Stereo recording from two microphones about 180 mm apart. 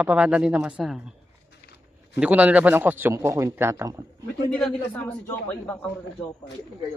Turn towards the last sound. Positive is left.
turn(degrees=10)  # may be behind; listen again after turning